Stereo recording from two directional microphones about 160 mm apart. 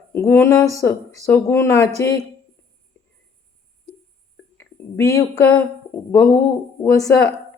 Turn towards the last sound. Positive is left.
turn(degrees=20)  # may be behind; listen again after turning